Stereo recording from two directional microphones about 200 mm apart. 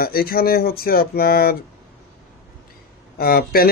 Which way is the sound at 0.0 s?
50° left (ahead or behind).